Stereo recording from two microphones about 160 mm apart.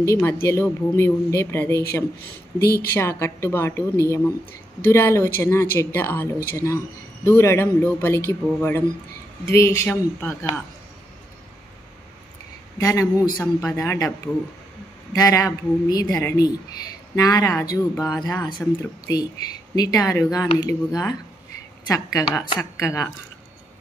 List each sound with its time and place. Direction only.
0.0 s a woman's voice: 15° left (ahead or behind)
2.6 s a woman's voice: 75° left (ahead or behind)
2.9 s a woman's voice: 15° left (ahead or behind)
12.7 s speech: 20° left (ahead or behind)